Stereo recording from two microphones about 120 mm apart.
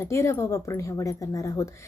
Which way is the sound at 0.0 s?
25° left (ahead or behind).